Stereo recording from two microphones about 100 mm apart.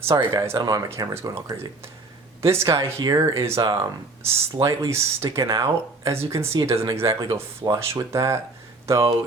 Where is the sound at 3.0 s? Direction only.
40° right (ahead or behind).